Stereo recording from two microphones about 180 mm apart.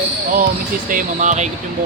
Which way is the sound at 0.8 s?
45° right (ahead or behind).